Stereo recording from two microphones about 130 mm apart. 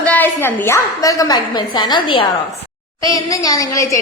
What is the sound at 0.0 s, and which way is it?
A woman's voice, 10° left (ahead or behind).